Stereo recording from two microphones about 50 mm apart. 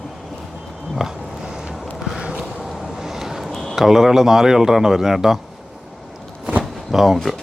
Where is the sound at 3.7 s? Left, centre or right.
Centre.